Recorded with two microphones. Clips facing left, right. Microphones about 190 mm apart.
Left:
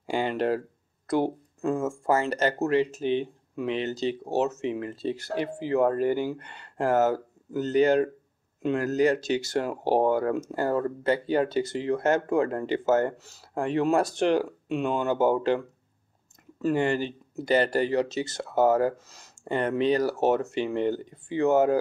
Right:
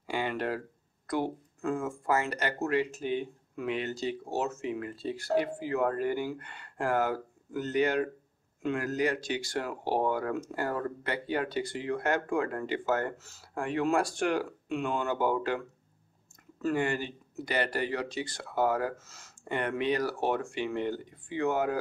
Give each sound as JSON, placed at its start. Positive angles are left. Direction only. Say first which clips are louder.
{"t": 0.1, "sound": "speech", "louder": "left 6 dB", "side_deg": 30}
{"t": 16.6, "sound": "speech", "louder": "left 5 dB", "side_deg": 30}